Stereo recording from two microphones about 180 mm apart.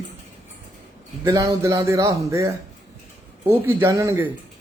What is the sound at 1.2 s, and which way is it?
Speech, 20° right (ahead or behind).